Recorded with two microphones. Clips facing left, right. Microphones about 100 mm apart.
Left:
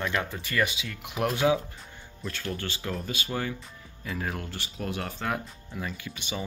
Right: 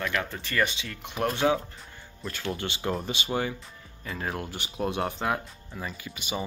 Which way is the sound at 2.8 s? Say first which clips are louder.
Right 3 dB; 30° right (ahead or behind).